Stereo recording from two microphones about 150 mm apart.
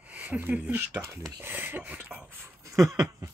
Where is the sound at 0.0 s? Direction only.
10° right (ahead or behind).